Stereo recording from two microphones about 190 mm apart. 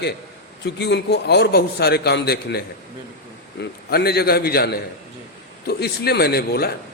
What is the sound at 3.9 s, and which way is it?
A man's voice, 55° left (ahead or behind).